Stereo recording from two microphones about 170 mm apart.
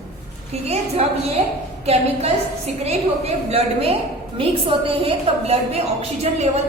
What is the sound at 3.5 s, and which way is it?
A woman's voice, 35° right (ahead or behind).